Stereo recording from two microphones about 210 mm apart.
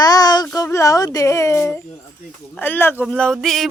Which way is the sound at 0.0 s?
20° left (ahead or behind).